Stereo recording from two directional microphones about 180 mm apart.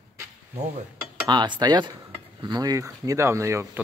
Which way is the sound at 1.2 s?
25° right (ahead or behind).